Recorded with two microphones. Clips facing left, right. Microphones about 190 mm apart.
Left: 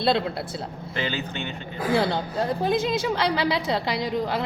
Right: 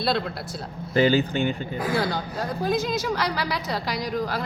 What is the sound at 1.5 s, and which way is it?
A woman's voice, 25° left (ahead or behind).